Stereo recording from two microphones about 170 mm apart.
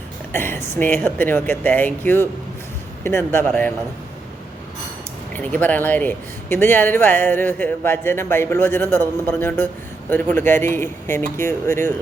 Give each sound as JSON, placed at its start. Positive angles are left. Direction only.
{"t": 0.3, "sound": "speech", "side_deg": 15}
{"t": 5.3, "sound": "speech", "side_deg": 10}